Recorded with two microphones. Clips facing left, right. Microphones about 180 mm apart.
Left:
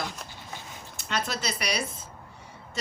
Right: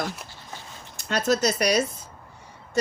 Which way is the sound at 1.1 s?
45° right (ahead or behind).